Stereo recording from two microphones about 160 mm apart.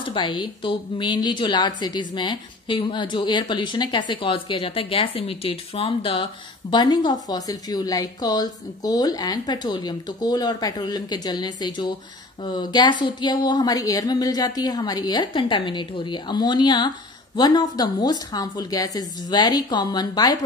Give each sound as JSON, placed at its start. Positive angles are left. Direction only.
{"t": 0.1, "sound": "speech", "side_deg": 30}